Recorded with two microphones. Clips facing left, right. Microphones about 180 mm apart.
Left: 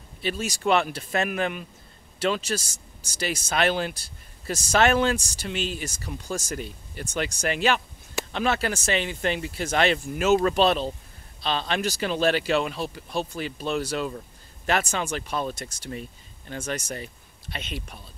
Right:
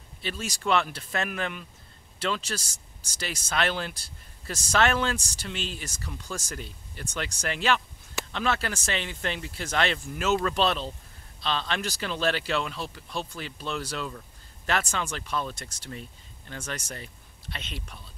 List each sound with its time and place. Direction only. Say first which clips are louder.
0.2 s speech: left 6 dB; 10° left (ahead or behind)